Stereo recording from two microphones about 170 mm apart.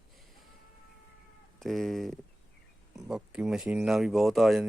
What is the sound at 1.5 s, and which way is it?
Speech, centre (ahead or behind).